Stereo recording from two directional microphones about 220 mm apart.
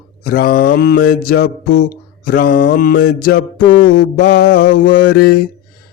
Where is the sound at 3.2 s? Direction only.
40° left (ahead or behind).